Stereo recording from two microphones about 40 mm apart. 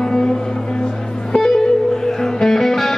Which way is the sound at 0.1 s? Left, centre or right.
Centre.